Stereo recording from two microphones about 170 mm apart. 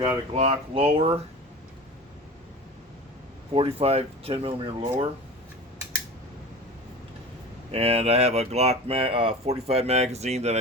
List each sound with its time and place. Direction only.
0.3 s speech: 35° right (ahead or behind)
3.5 s speech: 35° right (ahead or behind)
7.7 s speech: 35° right (ahead or behind)